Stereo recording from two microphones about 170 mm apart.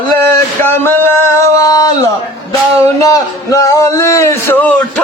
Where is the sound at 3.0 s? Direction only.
20° left (ahead or behind).